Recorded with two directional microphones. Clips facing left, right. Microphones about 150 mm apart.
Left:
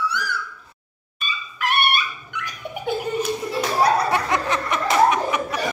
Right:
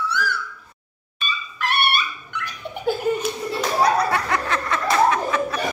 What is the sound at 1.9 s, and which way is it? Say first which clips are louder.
Dog: even; 10° left (ahead or behind).